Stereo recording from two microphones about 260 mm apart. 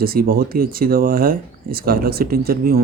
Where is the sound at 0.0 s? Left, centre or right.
Right.